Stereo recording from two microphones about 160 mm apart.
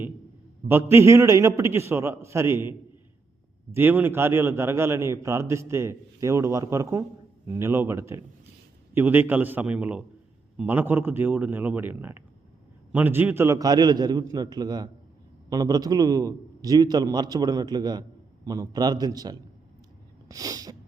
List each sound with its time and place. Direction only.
0.7 s a man's voice: 15° right (ahead or behind)
20.2 s sneeze: 20° right (ahead or behind)